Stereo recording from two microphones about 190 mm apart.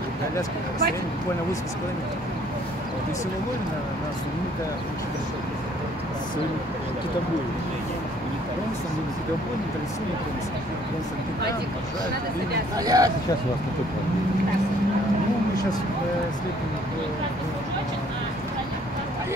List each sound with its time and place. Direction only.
12.7 s speech: 20° right (ahead or behind)